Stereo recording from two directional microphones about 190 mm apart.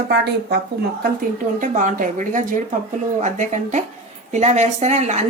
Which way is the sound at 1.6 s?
45° right (ahead or behind).